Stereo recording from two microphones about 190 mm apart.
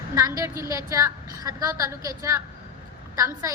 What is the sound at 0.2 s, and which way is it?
A woman's voice, 15° right (ahead or behind).